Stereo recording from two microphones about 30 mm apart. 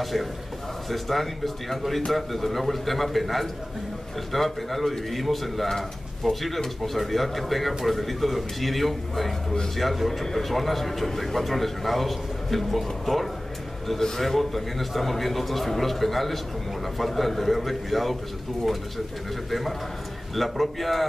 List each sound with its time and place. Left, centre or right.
0.0 s a man's voice: centre
20.3 s a man's voice: centre